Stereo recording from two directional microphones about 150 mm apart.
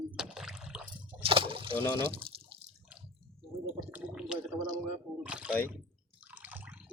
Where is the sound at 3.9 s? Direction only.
5° right (ahead or behind).